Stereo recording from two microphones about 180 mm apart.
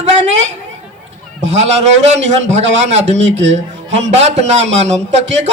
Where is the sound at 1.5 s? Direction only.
40° right (ahead or behind).